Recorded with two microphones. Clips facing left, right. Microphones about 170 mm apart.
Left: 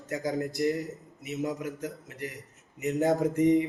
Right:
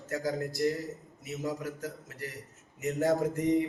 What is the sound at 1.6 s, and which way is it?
Speech, 20° left (ahead or behind).